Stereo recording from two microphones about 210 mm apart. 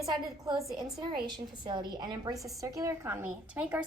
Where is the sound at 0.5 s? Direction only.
Centre (ahead or behind).